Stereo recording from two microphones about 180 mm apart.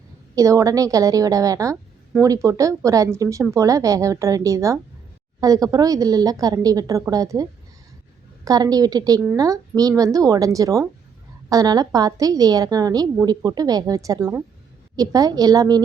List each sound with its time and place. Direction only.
0.3 s a woman's voice: 20° right (ahead or behind)
8.4 s a woman's voice: 20° right (ahead or behind)